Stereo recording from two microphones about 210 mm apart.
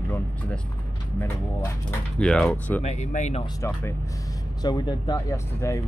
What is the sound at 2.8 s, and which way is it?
Speech, 35° left (ahead or behind).